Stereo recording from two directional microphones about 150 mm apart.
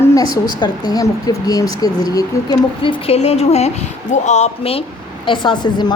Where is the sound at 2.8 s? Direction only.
35° left (ahead or behind).